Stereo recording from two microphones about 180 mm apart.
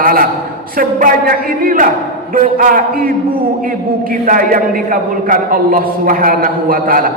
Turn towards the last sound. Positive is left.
turn(degrees=-50)  # may be behind; listen again after turning